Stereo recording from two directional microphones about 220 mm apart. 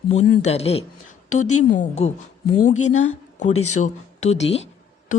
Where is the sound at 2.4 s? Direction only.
85° left.